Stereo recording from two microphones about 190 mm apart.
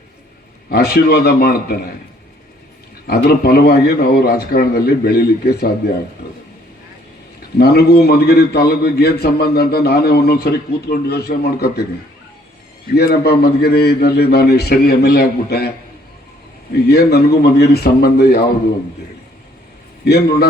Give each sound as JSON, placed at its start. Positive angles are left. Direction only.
{"t": 0.7, "sound": "a man's voice", "side_deg": 55}
{"t": 3.1, "sound": "a man's voice", "side_deg": 55}
{"t": 7.6, "sound": "a man's voice", "side_deg": 55}
{"t": 13.0, "sound": "a man's voice", "side_deg": 55}
{"t": 16.9, "sound": "a man's voice", "side_deg": 55}
{"t": 20.1, "sound": "a man's voice", "side_deg": 60}